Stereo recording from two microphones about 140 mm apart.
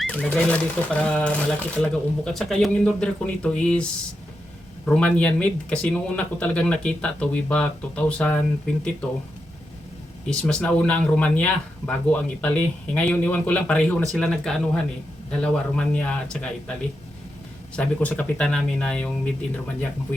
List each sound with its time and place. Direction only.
0.0 s speech: 5° left (ahead or behind)
4.9 s speech: 5° left (ahead or behind)
10.2 s speech: 5° left (ahead or behind)
17.7 s speech: 10° left (ahead or behind)